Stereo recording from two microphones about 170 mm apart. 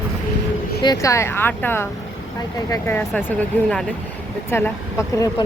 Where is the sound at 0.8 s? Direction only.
20° left (ahead or behind).